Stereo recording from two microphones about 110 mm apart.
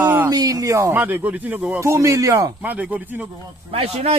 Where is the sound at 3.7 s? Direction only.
60° right (ahead or behind).